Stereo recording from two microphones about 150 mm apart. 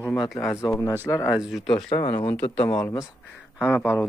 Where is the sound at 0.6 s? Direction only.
20° left (ahead or behind).